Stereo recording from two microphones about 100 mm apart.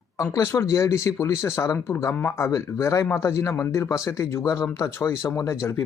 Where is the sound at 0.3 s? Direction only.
30° left (ahead or behind).